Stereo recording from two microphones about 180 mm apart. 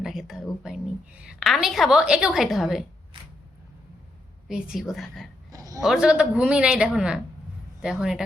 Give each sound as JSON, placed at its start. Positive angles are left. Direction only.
{"t": 0.0, "sound": "a woman's voice", "side_deg": 0}
{"t": 4.4, "sound": "a woman's voice", "side_deg": -5}
{"t": 5.5, "sound": "a sound", "side_deg": -20}
{"t": 5.8, "sound": "a woman's voice", "side_deg": -5}